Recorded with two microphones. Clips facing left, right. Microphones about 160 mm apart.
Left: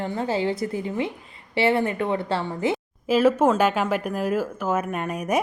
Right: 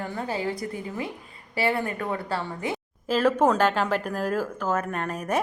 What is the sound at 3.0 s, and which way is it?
Speech, 10° left (ahead or behind).